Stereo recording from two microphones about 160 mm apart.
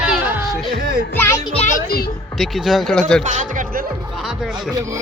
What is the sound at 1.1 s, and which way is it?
Speech, 15° left (ahead or behind).